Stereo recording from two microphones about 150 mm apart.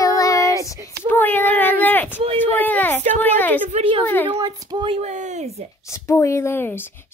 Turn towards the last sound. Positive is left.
turn(degrees=15)  # may be behind; listen again after turning